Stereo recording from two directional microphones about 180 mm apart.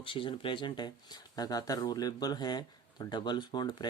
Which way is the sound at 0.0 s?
30° left (ahead or behind).